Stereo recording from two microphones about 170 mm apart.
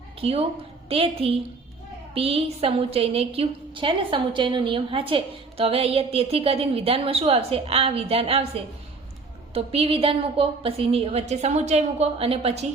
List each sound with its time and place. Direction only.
0.2 s a woman's voice: 35° right (ahead or behind)